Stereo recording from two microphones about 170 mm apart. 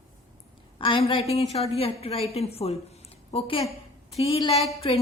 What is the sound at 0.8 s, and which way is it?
A woman's voice, 30° left (ahead or behind).